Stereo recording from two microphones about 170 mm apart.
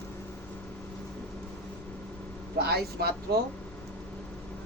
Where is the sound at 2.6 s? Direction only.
70° right (ahead or behind).